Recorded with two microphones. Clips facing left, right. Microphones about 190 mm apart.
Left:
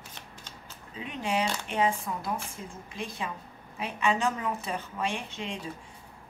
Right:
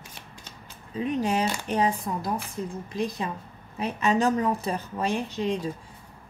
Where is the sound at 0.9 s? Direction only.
40° right (ahead or behind).